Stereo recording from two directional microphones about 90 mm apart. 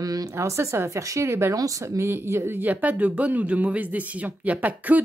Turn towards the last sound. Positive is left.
turn(degrees=-15)  # may be behind; listen again after turning